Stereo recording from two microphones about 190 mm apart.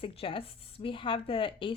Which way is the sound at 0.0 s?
30° left (ahead or behind).